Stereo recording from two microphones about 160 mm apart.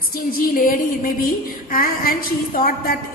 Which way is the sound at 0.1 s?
65° left (ahead or behind).